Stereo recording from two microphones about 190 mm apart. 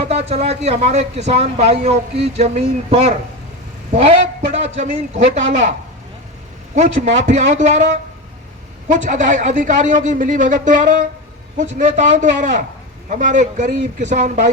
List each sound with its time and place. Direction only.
0.1 s speech: 35° right (ahead or behind)
4.5 s speech: 40° right (ahead or behind)
6.7 s speech: 40° right (ahead or behind)
8.9 s speech: 40° right (ahead or behind)